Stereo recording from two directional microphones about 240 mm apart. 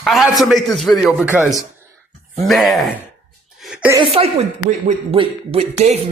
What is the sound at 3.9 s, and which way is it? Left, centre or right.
A woman's voice, right.